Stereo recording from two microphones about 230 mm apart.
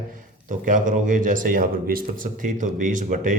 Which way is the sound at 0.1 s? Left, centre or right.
Right.